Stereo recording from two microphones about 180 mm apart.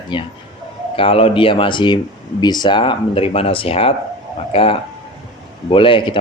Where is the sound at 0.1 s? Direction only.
25° left (ahead or behind).